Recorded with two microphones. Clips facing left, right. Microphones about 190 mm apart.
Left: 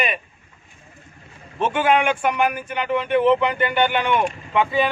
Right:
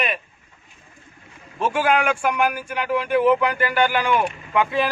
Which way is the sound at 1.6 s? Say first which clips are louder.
Left 1 dB; 5° right (ahead or behind).